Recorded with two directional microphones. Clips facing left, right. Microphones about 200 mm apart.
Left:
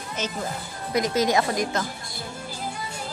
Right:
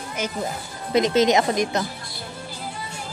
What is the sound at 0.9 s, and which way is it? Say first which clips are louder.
Speech: right 5 dB; 25° right (ahead or behind).